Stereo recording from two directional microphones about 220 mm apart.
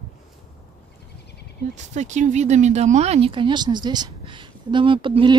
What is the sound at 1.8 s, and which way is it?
Speech, 35° right (ahead or behind).